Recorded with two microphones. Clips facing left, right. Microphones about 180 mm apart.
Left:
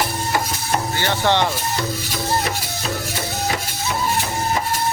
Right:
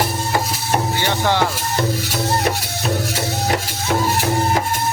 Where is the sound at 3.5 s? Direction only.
60° right (ahead or behind).